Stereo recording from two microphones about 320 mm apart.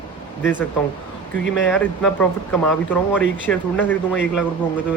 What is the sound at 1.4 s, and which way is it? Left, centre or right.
Speech, left.